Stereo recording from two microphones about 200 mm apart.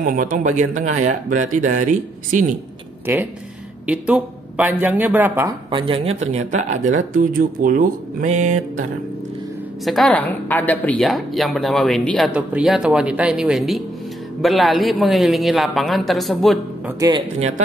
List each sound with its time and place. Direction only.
0.0 s speech: 40° right (ahead or behind)
3.1 s speech: 10° right (ahead or behind)
5.7 s speech: 25° right (ahead or behind)
9.8 s a man's voice: centre (ahead or behind)